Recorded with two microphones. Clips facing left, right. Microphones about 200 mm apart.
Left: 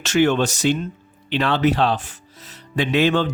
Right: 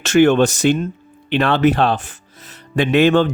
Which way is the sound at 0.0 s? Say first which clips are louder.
Right 5 dB; 55° right (ahead or behind).